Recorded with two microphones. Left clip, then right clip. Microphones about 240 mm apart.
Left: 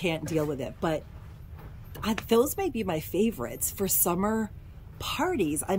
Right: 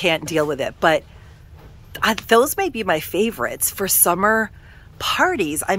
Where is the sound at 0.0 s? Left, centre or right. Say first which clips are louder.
Right 10 dB; centre.